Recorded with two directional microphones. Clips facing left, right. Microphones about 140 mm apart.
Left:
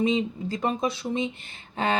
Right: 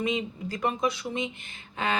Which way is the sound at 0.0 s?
25° left (ahead or behind).